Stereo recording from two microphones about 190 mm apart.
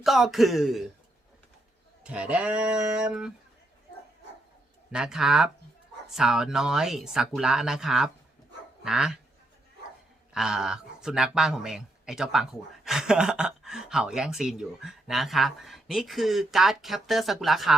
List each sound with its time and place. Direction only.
0.0 s speech: centre (ahead or behind)
2.0 s speech: 5° right (ahead or behind)
4.9 s speech: 5° right (ahead or behind)
10.3 s speech: 5° right (ahead or behind)